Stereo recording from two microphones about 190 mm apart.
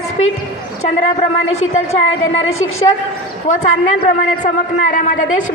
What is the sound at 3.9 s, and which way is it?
A man's voice, 45° left (ahead or behind).